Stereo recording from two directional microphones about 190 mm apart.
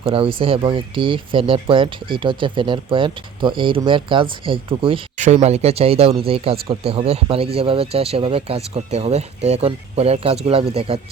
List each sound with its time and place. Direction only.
0.0 s speech: 30° right (ahead or behind)
5.1 s speech: 40° right (ahead or behind)